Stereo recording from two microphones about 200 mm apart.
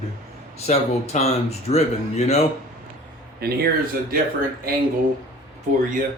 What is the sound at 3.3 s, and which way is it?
Speech, 50° right (ahead or behind).